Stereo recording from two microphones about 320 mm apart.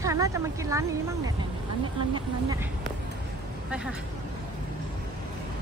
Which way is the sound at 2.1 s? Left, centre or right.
Centre.